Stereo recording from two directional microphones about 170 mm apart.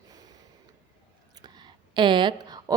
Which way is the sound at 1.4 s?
25° right (ahead or behind).